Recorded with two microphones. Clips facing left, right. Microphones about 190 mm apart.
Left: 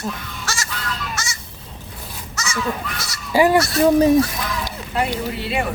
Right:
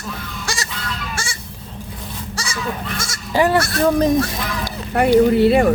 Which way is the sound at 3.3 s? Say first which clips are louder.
Left 1 dB; 10° left (ahead or behind).